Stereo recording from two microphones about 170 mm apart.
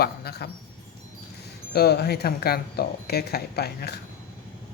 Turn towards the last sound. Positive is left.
turn(degrees=70)  # may be behind; listen again after turning